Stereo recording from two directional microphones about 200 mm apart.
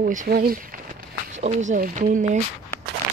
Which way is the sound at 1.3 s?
35° right (ahead or behind).